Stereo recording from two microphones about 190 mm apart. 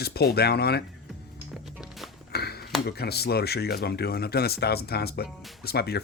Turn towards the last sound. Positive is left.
turn(degrees=55)  # may be behind; listen again after turning